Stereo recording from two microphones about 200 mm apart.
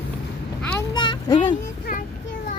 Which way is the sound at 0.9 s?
25° left (ahead or behind).